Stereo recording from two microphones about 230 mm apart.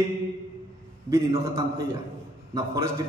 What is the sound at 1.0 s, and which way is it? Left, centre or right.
A man's voice, centre.